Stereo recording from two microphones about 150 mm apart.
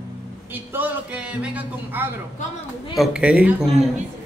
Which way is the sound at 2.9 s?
5° right (ahead or behind).